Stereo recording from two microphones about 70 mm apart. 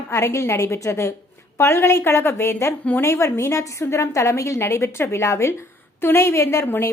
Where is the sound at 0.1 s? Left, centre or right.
Left.